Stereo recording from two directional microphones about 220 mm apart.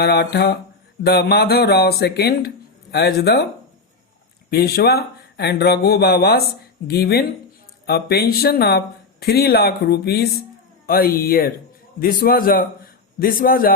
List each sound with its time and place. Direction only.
0.0 s speech: 45° left (ahead or behind)
4.5 s a man's voice: 45° left (ahead or behind)